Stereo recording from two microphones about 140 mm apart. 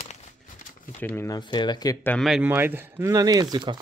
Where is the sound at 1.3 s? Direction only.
30° left (ahead or behind).